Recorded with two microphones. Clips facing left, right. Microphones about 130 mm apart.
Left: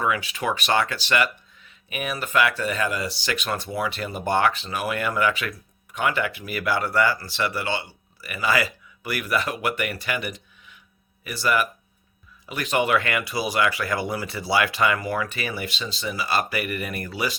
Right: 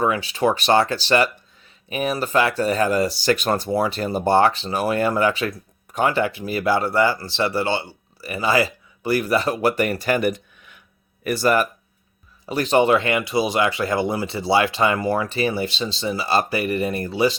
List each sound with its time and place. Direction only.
0.0 s speech: 30° right (ahead or behind)